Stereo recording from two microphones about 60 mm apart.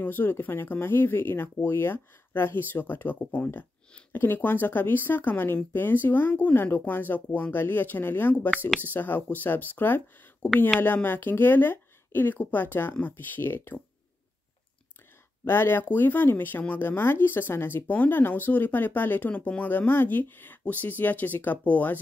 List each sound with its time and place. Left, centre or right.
0.0 s speech: left
15.4 s speech: left